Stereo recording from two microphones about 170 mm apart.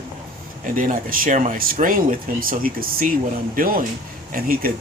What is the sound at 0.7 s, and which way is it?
Speech, 55° right (ahead or behind).